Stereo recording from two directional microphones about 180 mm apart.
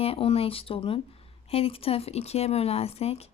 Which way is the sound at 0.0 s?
35° left (ahead or behind).